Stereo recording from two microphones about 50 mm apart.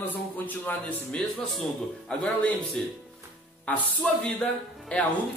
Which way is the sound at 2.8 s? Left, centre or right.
Centre.